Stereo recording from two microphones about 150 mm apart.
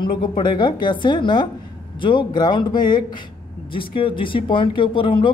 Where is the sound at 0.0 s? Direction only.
35° left (ahead or behind).